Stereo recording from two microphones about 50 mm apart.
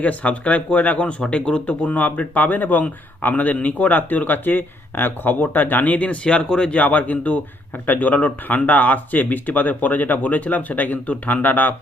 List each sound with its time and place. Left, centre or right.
0.0 s speech: left
6.7 s a man's voice: left